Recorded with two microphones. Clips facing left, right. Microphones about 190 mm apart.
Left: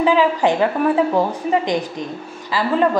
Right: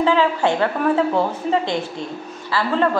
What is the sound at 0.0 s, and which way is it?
A woman's voice, 15° left (ahead or behind).